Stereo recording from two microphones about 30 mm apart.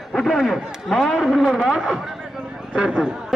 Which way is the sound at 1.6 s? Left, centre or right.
Right.